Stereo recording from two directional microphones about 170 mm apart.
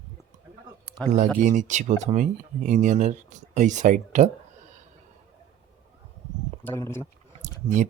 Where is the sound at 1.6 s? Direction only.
45° right (ahead or behind).